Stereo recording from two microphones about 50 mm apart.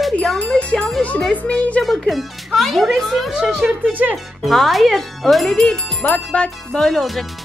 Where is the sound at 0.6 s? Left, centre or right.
Left.